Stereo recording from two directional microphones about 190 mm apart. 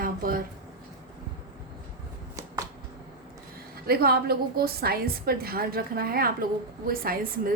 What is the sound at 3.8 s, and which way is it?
A woman's voice, 55° right (ahead or behind).